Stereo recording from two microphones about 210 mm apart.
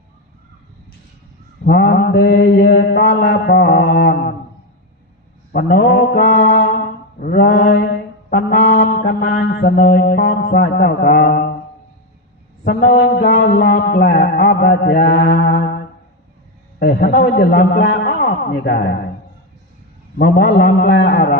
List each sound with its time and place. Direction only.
1.6 s music: 50° left (ahead or behind)
4.0 s a sound: 50° left (ahead or behind)
5.5 s music: 45° left (ahead or behind)
6.2 s brass instrument: 50° left (ahead or behind)
8.4 s music: 50° left (ahead or behind)
12.6 s music: 50° left (ahead or behind)
16.8 s music: 45° left (ahead or behind)
20.1 s music: 45° left (ahead or behind)